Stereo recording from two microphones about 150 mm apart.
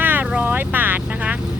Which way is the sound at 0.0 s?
10° right (ahead or behind).